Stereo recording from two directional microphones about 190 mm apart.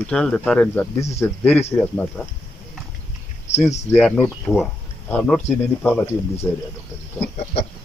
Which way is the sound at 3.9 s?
5° left (ahead or behind).